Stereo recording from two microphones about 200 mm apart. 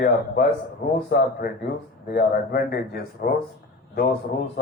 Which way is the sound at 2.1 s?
50° left (ahead or behind).